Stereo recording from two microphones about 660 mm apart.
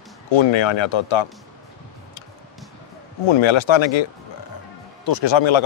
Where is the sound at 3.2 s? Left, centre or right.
Left.